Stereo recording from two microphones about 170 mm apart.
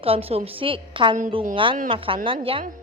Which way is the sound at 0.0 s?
35° right (ahead or behind).